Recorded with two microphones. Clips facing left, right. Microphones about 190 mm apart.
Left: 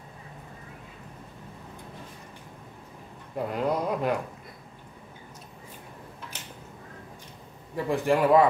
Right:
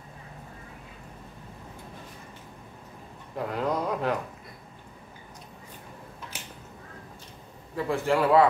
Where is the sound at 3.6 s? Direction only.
10° left (ahead or behind).